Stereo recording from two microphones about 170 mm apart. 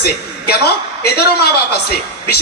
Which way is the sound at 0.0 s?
70° left (ahead or behind).